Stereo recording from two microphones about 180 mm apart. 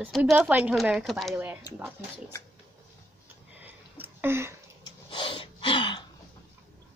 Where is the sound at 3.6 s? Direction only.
10° right (ahead or behind).